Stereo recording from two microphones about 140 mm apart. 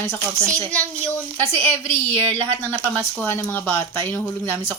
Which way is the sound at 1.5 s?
40° right (ahead or behind).